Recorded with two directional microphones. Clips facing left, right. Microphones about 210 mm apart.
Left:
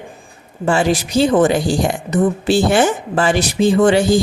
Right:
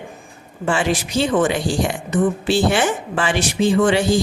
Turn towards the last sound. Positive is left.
turn(degrees=40)  # may be behind; listen again after turning